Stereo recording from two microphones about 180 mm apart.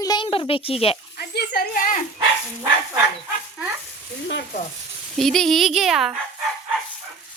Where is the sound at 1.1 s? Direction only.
60° left (ahead or behind).